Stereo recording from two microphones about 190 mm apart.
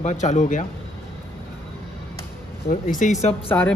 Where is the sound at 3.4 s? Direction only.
5° left (ahead or behind).